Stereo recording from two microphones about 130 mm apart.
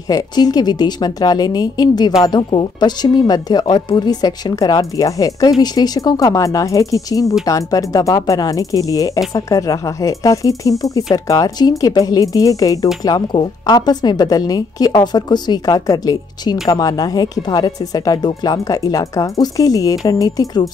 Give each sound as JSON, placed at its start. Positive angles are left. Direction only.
{"t": 0.1, "sound": "speech", "side_deg": 30}